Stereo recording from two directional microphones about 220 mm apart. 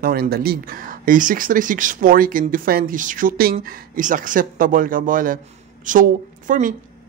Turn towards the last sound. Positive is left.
turn(degrees=-35)  # may be behind; listen again after turning